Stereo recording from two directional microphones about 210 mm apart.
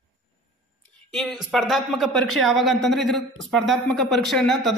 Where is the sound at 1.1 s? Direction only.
Centre (ahead or behind).